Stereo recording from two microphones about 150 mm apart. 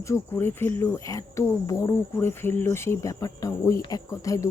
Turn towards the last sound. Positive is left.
turn(degrees=20)  # may be behind; listen again after turning